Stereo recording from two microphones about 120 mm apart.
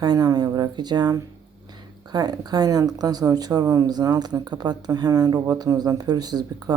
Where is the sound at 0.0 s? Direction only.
30° right (ahead or behind).